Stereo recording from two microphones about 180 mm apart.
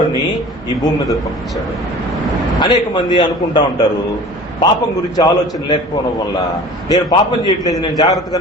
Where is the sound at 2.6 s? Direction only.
25° left (ahead or behind).